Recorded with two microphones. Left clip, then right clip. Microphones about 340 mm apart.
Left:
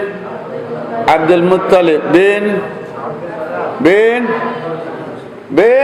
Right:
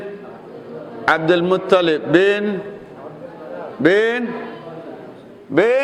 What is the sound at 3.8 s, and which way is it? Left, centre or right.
Speech, right.